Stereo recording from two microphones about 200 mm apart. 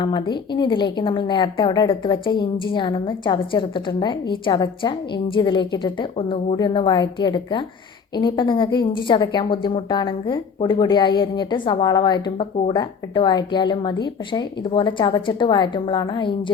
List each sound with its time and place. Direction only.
0.0 s a woman's voice: 25° left (ahead or behind)